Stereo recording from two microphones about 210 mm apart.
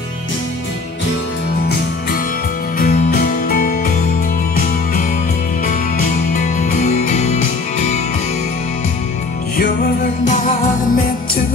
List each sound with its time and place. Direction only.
2.8 s music: 35° left (ahead or behind)
5.7 s music: 40° left (ahead or behind)
10.2 s music: 35° left (ahead or behind)